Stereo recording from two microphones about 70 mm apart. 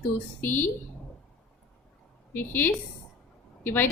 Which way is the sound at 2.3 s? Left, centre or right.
Left.